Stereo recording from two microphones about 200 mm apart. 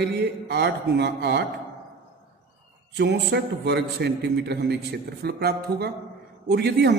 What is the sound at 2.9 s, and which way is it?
A man's voice, 55° right (ahead or behind).